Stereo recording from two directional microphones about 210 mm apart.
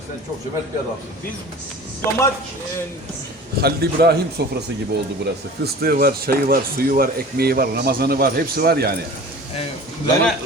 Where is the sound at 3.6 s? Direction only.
50° right (ahead or behind).